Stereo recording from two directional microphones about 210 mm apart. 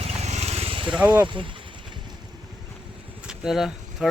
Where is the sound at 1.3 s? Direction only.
25° right (ahead or behind).